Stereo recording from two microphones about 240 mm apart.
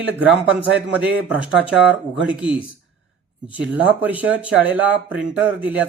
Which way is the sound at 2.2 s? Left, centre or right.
Centre.